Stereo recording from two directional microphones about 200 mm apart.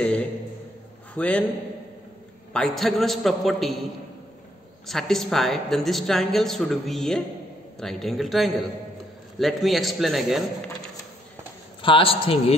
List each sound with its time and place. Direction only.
0.0 s a man's voice: 5° left (ahead or behind)
2.5 s a woman's voice: centre (ahead or behind)
4.8 s a woman's voice: centre (ahead or behind)
11.8 s a man's voice: 25° left (ahead or behind)